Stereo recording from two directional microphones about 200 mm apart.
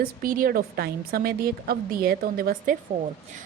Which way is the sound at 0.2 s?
45° right (ahead or behind).